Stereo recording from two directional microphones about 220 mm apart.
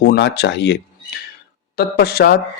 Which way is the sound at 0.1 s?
50° left (ahead or behind).